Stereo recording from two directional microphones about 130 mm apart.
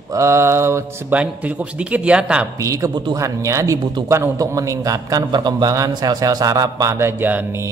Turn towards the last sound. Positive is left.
turn(degrees=-15)  # may be behind; listen again after turning